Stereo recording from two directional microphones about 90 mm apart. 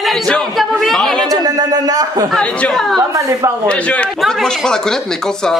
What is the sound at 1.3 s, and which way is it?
Speech, 45° right (ahead or behind).